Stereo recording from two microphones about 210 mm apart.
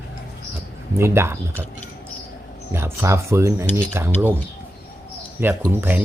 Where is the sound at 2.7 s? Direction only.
10° right (ahead or behind).